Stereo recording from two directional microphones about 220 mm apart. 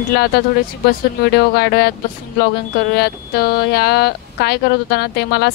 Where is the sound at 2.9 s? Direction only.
45° left (ahead or behind).